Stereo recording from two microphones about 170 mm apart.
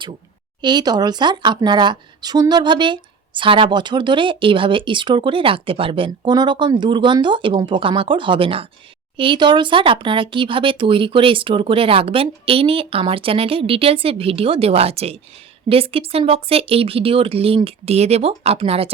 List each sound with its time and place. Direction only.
0.6 s speech: 25° right (ahead or behind)